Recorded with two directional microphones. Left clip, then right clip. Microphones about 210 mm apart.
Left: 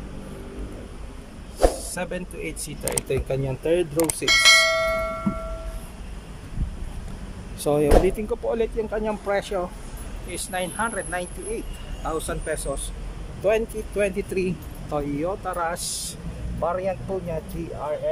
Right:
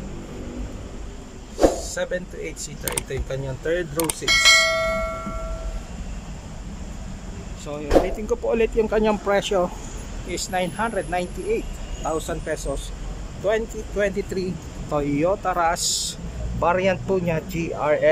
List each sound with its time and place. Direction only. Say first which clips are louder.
1.6 s speech: right 3 dB; 5° left (ahead or behind)
7.6 s speech: left 11 dB; 30° left (ahead or behind)
8.3 s speech: right 3 dB; 10° right (ahead or behind)
16.5 s speech: right 5 dB; 10° right (ahead or behind)